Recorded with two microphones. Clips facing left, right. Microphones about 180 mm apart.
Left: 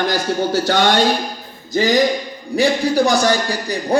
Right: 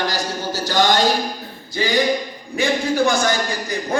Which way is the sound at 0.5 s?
60° left (ahead or behind).